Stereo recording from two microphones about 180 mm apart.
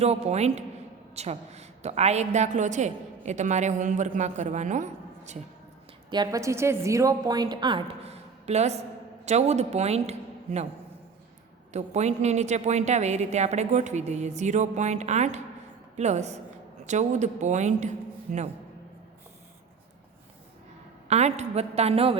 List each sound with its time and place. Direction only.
0.0 s a woman's voice: 35° right (ahead or behind)
6.1 s a woman's voice: 20° right (ahead or behind); by 10.7 s 35° right (ahead or behind)
11.7 s a woman's voice: 40° right (ahead or behind)
21.1 s a woman's voice: 40° right (ahead or behind)